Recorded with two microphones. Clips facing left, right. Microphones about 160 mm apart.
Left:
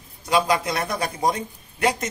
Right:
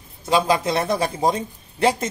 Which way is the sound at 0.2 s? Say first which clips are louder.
Right 2 dB; 25° right (ahead or behind).